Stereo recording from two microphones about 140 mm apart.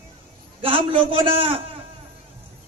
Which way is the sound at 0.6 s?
40° right (ahead or behind).